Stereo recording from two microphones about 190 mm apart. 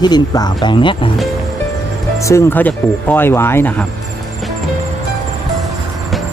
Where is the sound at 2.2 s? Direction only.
15° left (ahead or behind).